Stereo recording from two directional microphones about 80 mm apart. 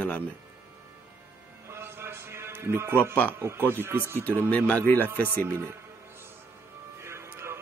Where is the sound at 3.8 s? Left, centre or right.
Right.